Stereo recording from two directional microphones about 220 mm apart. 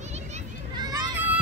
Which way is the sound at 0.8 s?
15° right (ahead or behind).